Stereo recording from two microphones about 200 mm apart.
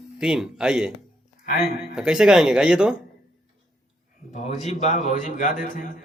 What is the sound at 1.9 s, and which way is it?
Speech, 5° right (ahead or behind).